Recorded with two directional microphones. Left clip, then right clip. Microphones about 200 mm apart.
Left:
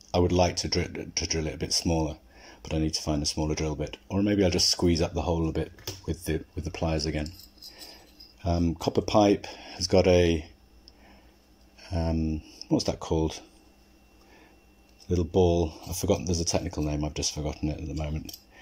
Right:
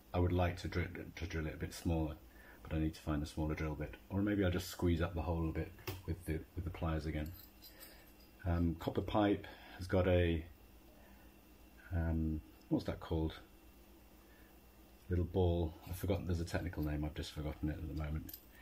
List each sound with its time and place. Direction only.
0.1 s speech: 35° left (ahead or behind)
8.5 s speech: 30° left (ahead or behind)
11.9 s speech: 40° left (ahead or behind)
15.0 s speech: 30° left (ahead or behind)